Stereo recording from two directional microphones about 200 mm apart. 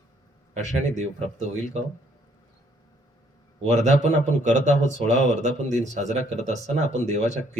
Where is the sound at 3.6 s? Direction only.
35° right (ahead or behind).